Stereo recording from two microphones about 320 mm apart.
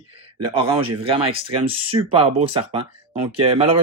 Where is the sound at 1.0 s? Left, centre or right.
Centre.